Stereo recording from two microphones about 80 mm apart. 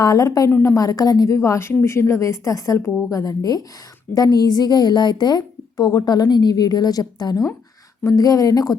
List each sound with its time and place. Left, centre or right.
0.0 s a woman's voice: left